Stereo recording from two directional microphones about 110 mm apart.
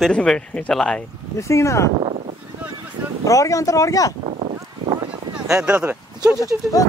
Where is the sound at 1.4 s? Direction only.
25° left (ahead or behind).